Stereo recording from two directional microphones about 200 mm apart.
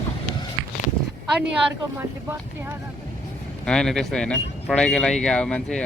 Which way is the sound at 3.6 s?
Centre (ahead or behind).